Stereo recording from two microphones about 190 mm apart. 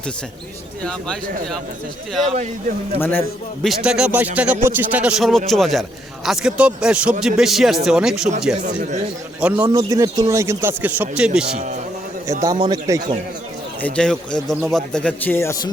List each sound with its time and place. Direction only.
0.8 s a man's voice: 5° left (ahead or behind)
3.0 s a man's voice: 10° left (ahead or behind)
3.8 s a man's voice: 5° right (ahead or behind)
8.6 s speech: 40° right (ahead or behind)
9.4 s a man's voice: 10° right (ahead or behind)
9.6 s a man's voice: 20° right (ahead or behind)
12.3 s a man's voice: 20° right (ahead or behind)
13.8 s a man's voice: 5° left (ahead or behind)